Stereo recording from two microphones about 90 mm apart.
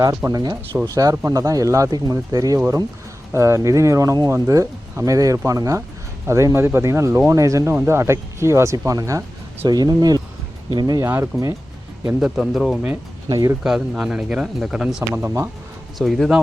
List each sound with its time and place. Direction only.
0.3 s speech: 40° right (ahead or behind)
9.6 s speech: 50° right (ahead or behind)
11.0 s speech: 30° right (ahead or behind)
12.0 s speech: 10° right (ahead or behind)
13.2 s speech: 40° right (ahead or behind)
13.7 s speech: 5° right (ahead or behind)
15.1 s speech: 30° right (ahead or behind)
16.0 s speech: centre (ahead or behind)